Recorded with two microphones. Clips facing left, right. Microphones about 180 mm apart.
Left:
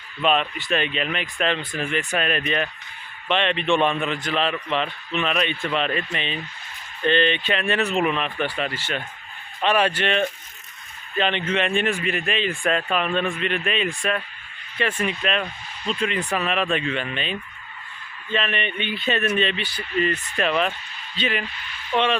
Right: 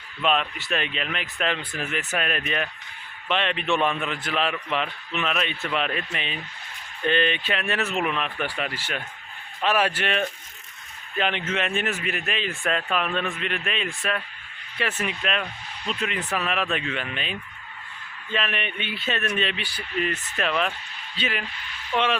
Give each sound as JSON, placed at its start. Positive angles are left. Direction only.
{"t": 0.2, "sound": "speech", "side_deg": 0}